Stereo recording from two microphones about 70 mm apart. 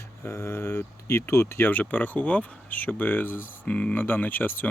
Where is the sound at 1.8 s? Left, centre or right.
Left.